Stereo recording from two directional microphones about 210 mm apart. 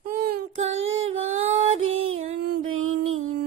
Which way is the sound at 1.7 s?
75° right (ahead or behind).